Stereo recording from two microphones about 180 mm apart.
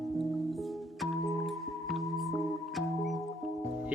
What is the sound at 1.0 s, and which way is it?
Music, centre (ahead or behind).